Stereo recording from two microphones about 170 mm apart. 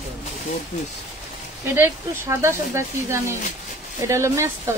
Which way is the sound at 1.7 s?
15° right (ahead or behind).